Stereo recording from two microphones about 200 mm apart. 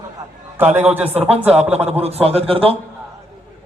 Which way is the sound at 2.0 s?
30° right (ahead or behind).